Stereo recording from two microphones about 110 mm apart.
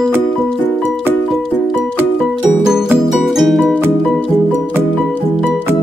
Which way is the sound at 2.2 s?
5° right (ahead or behind).